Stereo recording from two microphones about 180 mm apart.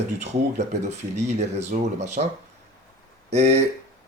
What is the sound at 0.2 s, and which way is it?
Speech, 40° right (ahead or behind).